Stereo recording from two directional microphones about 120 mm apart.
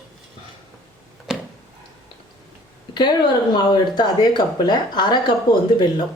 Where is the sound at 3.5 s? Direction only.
35° left (ahead or behind).